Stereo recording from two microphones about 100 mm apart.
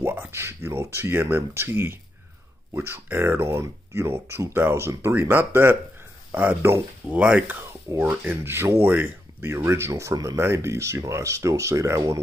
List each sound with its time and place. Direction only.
0.0 s speech: 25° right (ahead or behind)